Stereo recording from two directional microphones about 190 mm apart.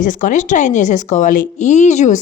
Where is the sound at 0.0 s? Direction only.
45° left (ahead or behind).